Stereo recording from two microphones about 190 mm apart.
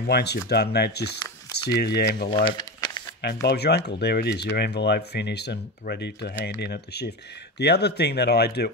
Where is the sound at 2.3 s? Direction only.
25° left (ahead or behind).